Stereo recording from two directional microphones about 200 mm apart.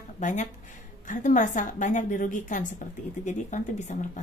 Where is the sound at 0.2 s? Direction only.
40° left (ahead or behind).